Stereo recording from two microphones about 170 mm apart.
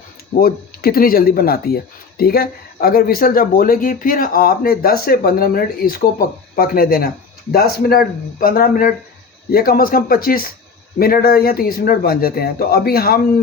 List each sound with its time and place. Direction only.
0.3 s speech: 60° left (ahead or behind)